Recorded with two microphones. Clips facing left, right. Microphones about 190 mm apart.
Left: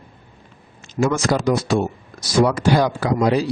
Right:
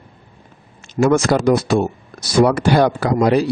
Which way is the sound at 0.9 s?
60° right (ahead or behind).